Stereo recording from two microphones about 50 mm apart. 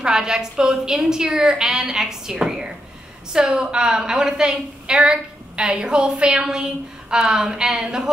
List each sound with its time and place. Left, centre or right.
0.0 s a woman's voice: centre